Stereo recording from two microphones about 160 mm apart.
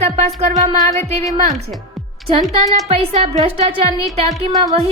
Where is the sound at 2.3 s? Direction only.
40° right (ahead or behind).